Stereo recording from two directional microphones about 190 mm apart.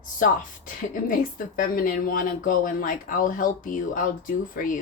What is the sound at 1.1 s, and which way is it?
Speech, 45° left (ahead or behind).